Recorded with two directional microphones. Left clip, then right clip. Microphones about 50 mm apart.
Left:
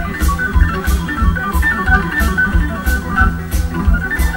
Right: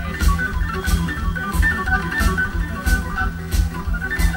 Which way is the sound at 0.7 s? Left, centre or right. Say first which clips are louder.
Left 4 dB; right.